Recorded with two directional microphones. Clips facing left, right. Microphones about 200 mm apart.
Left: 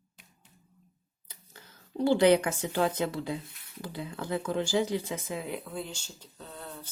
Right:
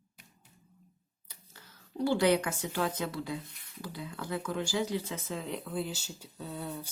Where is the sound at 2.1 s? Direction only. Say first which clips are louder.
Left 5 dB; 25° left (ahead or behind).